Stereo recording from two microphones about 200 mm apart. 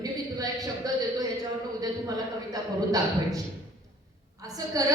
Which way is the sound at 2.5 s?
15° right (ahead or behind).